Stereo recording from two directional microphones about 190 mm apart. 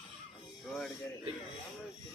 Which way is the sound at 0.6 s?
5° left (ahead or behind).